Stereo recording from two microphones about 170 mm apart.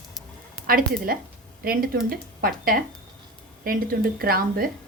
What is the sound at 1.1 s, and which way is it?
Speech, 55° right (ahead or behind).